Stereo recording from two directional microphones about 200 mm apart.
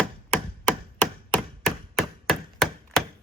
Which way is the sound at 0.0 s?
5° left (ahead or behind).